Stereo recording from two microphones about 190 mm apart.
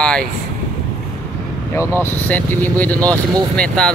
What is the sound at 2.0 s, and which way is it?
Speech, 10° left (ahead or behind).